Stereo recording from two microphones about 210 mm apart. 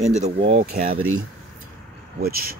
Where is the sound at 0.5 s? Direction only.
45° right (ahead or behind).